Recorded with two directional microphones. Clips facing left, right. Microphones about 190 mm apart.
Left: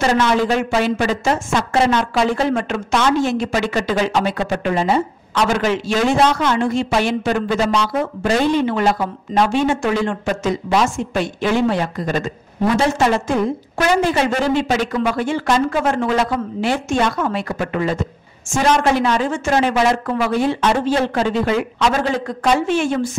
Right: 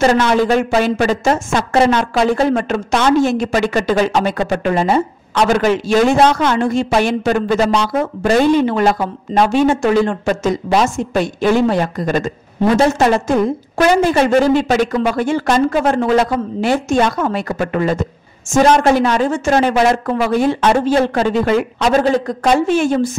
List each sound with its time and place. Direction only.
0.0 s a woman's voice: 45° right (ahead or behind)